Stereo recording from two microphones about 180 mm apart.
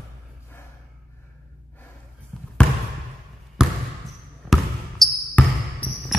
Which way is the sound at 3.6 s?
5° right (ahead or behind).